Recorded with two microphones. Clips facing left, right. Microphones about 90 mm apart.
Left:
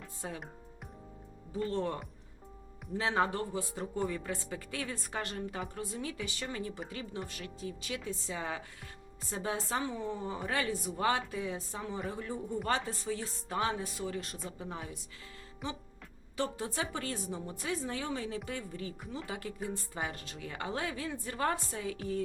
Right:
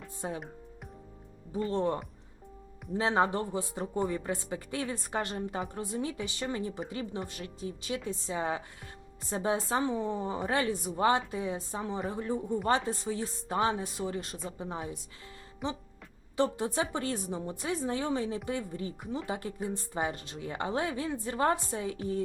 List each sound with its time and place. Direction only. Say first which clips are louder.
0.2 s a woman's voice: right 5 dB; 25° right (ahead or behind)
1.5 s a woman's voice: right 4 dB; 15° right (ahead or behind)
16.4 s a woman's voice: right 6 dB; 20° right (ahead or behind)